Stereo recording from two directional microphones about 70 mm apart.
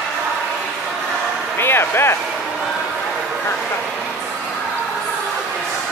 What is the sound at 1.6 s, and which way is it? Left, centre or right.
Speech, left.